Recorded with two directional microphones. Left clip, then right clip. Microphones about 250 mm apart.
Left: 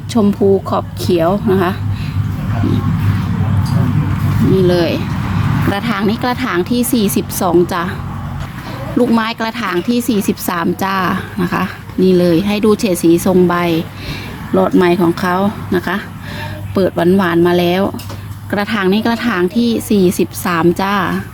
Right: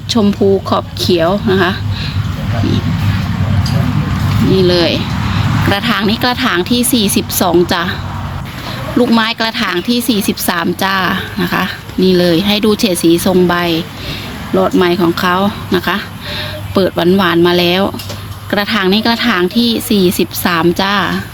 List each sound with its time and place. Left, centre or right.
0.1 s speech: centre
4.5 s speech: centre
9.0 s speech: centre